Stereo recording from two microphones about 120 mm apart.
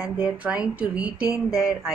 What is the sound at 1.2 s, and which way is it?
Speech, 25° left (ahead or behind).